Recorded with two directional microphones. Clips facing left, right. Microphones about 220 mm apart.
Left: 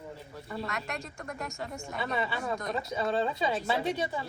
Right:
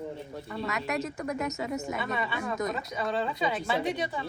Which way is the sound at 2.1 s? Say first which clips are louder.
Right 1 dB; 30° left (ahead or behind).